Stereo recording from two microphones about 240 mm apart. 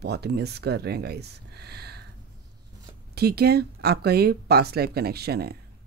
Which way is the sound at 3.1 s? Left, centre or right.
Right.